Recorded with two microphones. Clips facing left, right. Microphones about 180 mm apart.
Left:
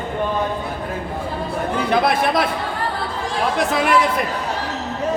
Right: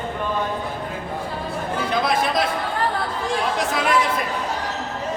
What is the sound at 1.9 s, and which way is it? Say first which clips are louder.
Speech: left 4 dB; 60° left (ahead or behind).